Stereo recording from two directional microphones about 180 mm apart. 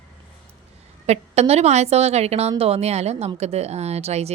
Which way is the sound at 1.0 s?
35° right (ahead or behind).